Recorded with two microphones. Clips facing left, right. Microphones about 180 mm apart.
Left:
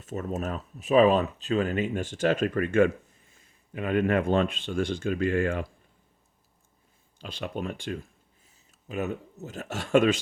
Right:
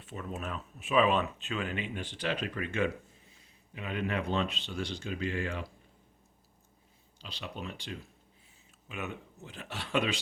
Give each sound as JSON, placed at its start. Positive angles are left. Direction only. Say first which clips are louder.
{"t": 0.0, "sound": "speech", "louder": "left 8 dB", "side_deg": 40}
{"t": 7.2, "sound": "speech", "louder": "left 8 dB", "side_deg": 50}
{"t": 8.9, "sound": "speech", "louder": "left 9 dB", "side_deg": 40}